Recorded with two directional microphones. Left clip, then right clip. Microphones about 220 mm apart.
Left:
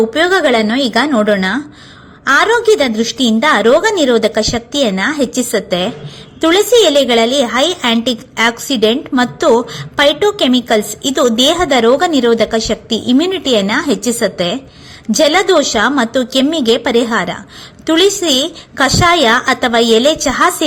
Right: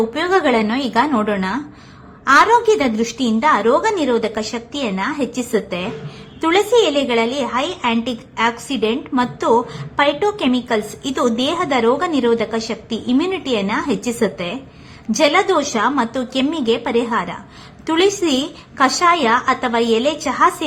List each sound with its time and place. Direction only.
0.1 s a woman's voice: 15° left (ahead or behind)